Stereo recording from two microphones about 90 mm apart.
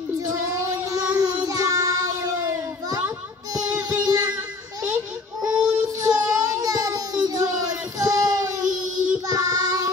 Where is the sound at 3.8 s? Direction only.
45° right (ahead or behind).